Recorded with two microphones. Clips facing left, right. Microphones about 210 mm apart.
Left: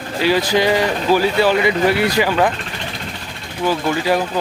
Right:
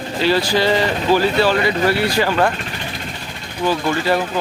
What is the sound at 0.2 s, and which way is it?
Speech, 15° left (ahead or behind).